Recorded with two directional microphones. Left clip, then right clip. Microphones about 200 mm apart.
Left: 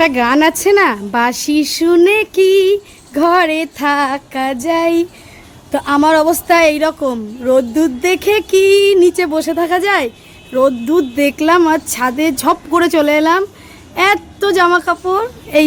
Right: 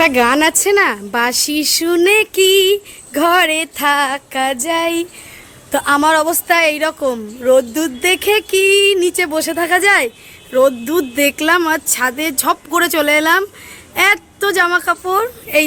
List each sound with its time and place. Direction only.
0.0 s a woman's voice: centre (ahead or behind)